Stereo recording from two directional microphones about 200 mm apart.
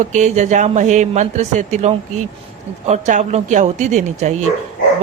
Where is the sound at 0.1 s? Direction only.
35° right (ahead or behind).